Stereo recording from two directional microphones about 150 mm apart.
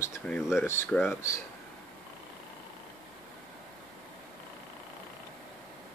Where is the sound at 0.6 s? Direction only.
15° left (ahead or behind).